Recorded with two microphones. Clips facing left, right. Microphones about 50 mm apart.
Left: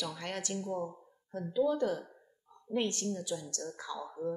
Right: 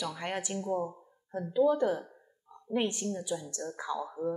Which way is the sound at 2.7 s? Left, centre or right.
Centre.